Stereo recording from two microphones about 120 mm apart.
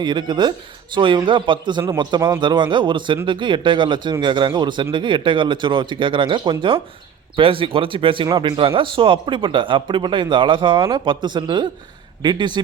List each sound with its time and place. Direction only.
0.0 s speech: 40° right (ahead or behind)